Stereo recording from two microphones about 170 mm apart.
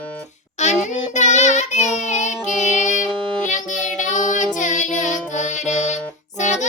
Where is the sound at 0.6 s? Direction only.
45° left (ahead or behind).